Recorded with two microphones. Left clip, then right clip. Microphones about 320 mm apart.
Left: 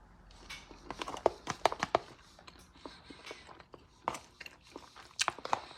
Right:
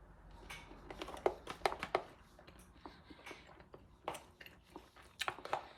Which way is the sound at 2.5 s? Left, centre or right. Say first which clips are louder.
Left 6 dB; centre.